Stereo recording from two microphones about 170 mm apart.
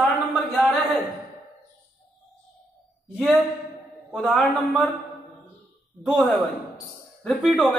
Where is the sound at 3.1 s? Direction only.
Centre (ahead or behind).